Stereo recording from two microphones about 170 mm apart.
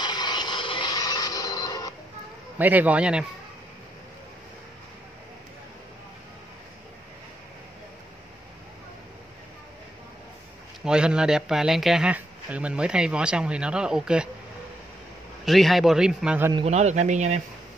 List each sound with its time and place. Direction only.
0.0 s a sound: 25° left (ahead or behind)
2.6 s a man's voice: 10° right (ahead or behind)
10.8 s speech: 5° right (ahead or behind)
15.4 s speech: centre (ahead or behind)
16.5 s speech: 40° right (ahead or behind)